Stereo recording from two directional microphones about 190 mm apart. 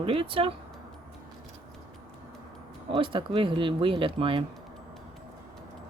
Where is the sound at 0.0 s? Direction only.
30° right (ahead or behind).